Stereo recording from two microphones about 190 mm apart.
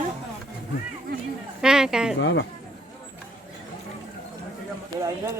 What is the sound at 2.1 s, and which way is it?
Speech, 70° left (ahead or behind).